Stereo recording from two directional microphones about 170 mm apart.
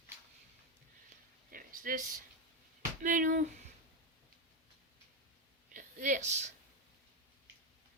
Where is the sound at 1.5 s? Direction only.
55° right (ahead or behind).